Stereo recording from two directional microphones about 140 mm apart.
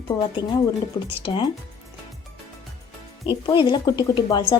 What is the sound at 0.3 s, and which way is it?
Speech, 30° left (ahead or behind).